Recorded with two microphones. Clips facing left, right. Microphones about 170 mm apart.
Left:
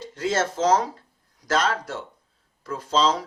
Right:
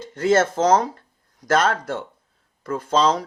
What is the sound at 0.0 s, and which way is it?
Speech, 50° right (ahead or behind).